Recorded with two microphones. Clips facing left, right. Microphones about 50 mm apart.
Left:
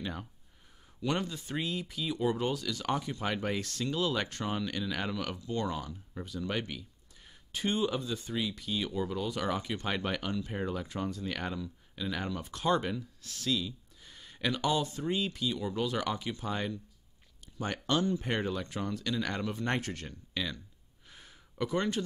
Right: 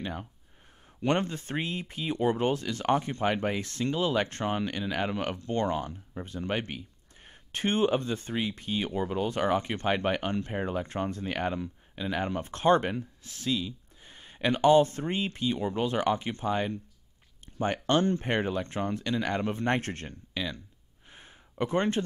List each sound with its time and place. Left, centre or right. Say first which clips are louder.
0.0 s speech: right 3 dB; centre
1.0 s speech: right 5 dB; right
3.4 s speech: right 4 dB; right
4.3 s speech: right 4 dB; right
9.8 s speech: right 6 dB; right
11.9 s speech: right 5 dB; right
12.3 s speech: right 7 dB; right
13.2 s speech: right 2 dB; right
16.4 s speech: right 6 dB; right
17.5 s a sound: right 5 dB; right
18.2 s speech: right 4 dB; right
21.1 s a sound: right 3 dB; right